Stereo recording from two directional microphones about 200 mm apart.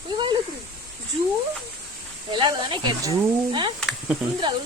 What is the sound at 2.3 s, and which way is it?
Speech, 25° right (ahead or behind).